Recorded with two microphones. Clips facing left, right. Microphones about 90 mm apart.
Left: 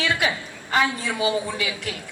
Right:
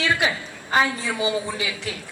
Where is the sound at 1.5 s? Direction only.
50° left (ahead or behind).